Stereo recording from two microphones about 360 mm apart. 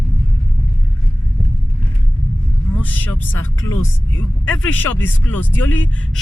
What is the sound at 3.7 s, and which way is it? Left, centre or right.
Speech, left.